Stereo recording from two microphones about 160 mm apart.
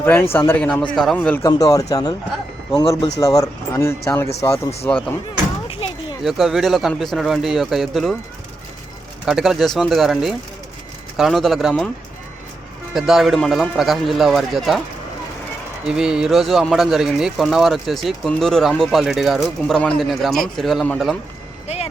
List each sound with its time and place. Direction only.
0.0 s speech: 10° left (ahead or behind)
1.5 s speech: 25° left (ahead or behind)
5.6 s a sound: 35° left (ahead or behind)
6.2 s speech: centre (ahead or behind)
9.2 s speech: 5° right (ahead or behind)
12.9 s speech: centre (ahead or behind)
15.8 s speech: 5° right (ahead or behind)
21.7 s a sound: 40° left (ahead or behind)